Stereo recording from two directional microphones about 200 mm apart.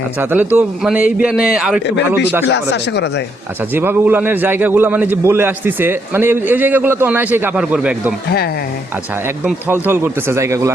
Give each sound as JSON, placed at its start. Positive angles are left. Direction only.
{"t": 0.2, "sound": "a man's voice", "side_deg": -10}
{"t": 2.5, "sound": "speech", "side_deg": 60}
{"t": 3.8, "sound": "a man's voice", "side_deg": -10}
{"t": 9.8, "sound": "a man's voice", "side_deg": -10}